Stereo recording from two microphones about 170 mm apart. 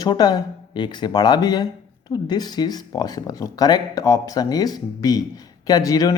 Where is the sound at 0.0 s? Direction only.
25° left (ahead or behind).